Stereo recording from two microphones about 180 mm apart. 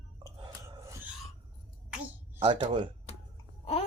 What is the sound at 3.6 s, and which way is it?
Chewing, 35° left (ahead or behind).